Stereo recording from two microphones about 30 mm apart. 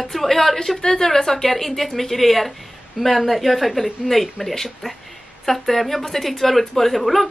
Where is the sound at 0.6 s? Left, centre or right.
Centre.